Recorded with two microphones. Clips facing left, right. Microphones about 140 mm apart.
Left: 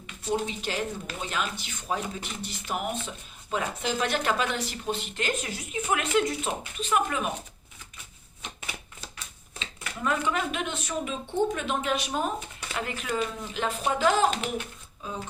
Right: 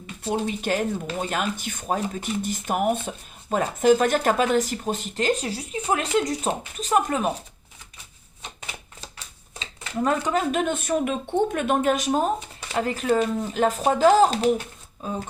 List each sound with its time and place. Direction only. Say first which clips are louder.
0.3 s speech: right 5 dB; 50° right (ahead or behind)
9.1 s a sound: right 1 dB; 35° right (ahead or behind)
11.5 s speech: right 7 dB; 55° right (ahead or behind); by 14.5 s 35° right (ahead or behind)